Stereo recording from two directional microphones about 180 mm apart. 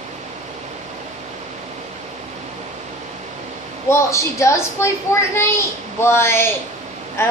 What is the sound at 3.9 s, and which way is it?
A woman's voice, 15° left (ahead or behind).